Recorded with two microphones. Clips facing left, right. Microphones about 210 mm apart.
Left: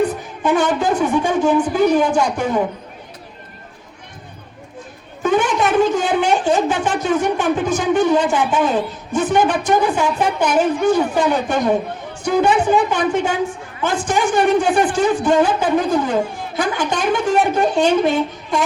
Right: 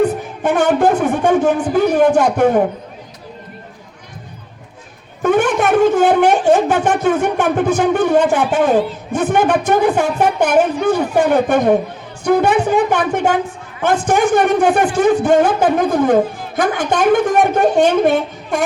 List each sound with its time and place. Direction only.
0.4 s a woman's voice: 60° right (ahead or behind)
5.2 s a woman's voice: 60° right (ahead or behind)